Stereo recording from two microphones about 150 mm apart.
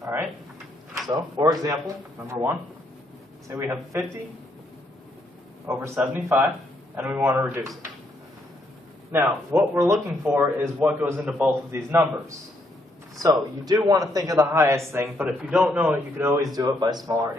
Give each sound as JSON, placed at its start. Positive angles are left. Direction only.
{"t": 0.0, "sound": "a sound", "side_deg": -15}
{"t": 1.0, "sound": "speech", "side_deg": -25}
{"t": 3.4, "sound": "a man's voice", "side_deg": -20}
{"t": 5.7, "sound": "a man's voice", "side_deg": -15}
{"t": 9.1, "sound": "a man's voice", "side_deg": -15}
{"t": 13.2, "sound": "a man's voice", "side_deg": -25}